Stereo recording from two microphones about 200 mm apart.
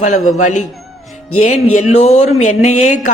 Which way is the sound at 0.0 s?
35° left (ahead or behind).